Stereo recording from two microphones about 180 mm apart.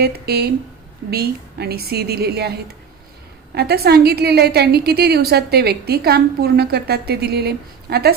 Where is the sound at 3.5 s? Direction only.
60° right (ahead or behind).